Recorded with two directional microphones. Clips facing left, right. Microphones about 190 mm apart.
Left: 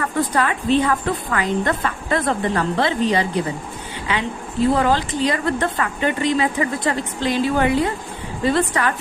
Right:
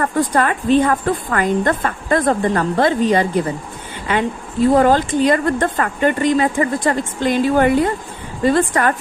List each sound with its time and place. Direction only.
0.0 s a woman's voice: 45° right (ahead or behind)